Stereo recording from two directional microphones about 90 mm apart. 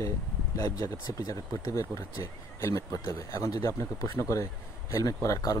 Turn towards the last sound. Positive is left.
turn(degrees=40)  # may be behind; listen again after turning